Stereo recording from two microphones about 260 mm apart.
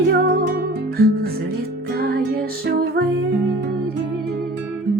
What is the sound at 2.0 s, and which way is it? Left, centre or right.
Music, right.